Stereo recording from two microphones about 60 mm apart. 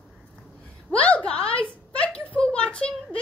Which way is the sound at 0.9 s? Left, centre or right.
Left.